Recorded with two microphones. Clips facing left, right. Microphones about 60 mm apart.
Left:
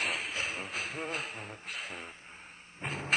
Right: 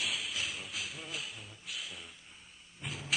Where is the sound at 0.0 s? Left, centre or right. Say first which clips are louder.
Left 3 dB; left.